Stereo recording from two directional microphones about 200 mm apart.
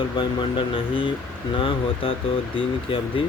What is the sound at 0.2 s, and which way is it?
Speech, 25° left (ahead or behind).